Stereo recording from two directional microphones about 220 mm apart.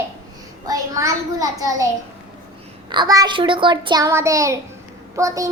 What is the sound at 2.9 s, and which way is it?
A child's voice, 20° right (ahead or behind).